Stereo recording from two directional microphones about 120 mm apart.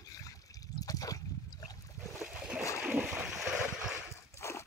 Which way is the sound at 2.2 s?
10° right (ahead or behind).